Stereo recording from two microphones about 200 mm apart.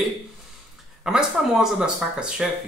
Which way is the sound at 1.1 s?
5° right (ahead or behind).